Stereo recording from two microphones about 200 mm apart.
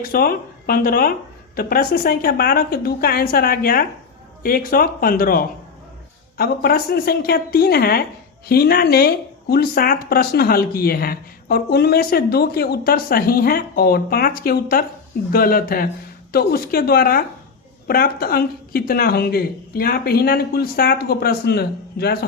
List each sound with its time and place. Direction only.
0.0 s speech: 50° left (ahead or behind)